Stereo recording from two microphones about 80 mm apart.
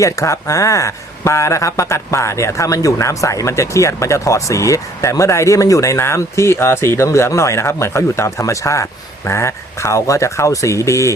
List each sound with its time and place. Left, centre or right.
0.0 s a man's voice: left